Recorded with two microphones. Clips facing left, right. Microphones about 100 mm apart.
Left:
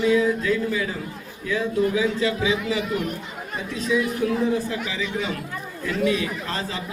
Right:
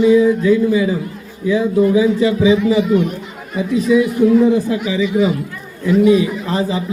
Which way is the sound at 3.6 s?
10° right (ahead or behind).